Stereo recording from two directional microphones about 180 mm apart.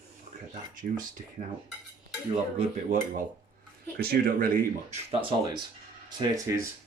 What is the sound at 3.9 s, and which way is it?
Speech, 60° right (ahead or behind).